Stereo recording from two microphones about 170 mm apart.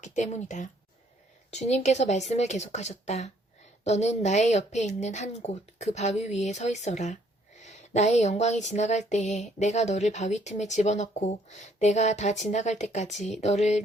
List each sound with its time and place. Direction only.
0.0 s speech: 45° left (ahead or behind)